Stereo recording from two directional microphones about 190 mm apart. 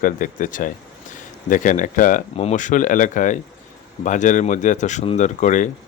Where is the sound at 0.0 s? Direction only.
45° left (ahead or behind).